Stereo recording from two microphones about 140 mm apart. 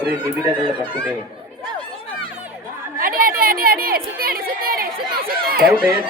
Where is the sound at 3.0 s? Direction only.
90° right.